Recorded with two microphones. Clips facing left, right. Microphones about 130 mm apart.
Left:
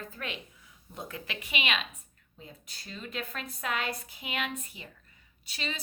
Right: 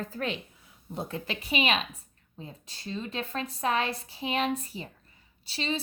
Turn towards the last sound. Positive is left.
turn(degrees=-30)  # may be behind; listen again after turning